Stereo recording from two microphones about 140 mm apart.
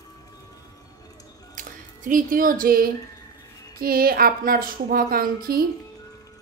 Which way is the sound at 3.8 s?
90° right.